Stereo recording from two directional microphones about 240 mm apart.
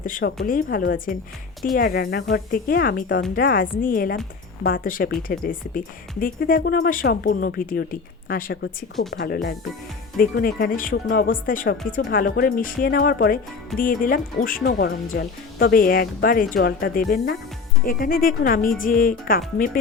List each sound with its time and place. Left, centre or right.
0.0 s speech: left